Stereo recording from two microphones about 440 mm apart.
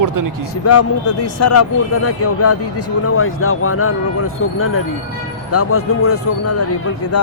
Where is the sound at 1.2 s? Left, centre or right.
Left.